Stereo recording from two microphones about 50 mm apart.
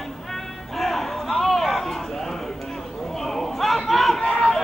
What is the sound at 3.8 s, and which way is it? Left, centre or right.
Run, centre.